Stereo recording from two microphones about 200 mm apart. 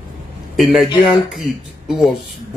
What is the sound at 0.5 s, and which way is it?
A man's voice, centre (ahead or behind).